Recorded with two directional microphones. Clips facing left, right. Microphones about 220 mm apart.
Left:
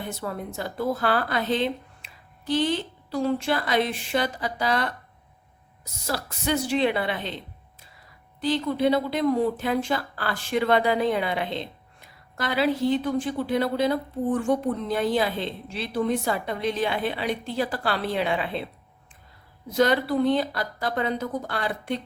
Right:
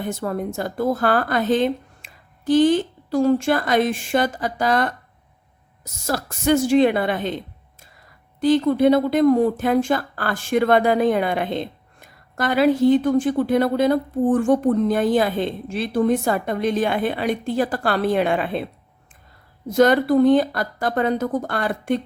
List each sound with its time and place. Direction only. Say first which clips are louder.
0.1 s speech: right 7 dB; 45° right (ahead or behind)
8.4 s speech: right 8 dB; 50° right (ahead or behind)
19.7 s speech: right 6 dB; 50° right (ahead or behind)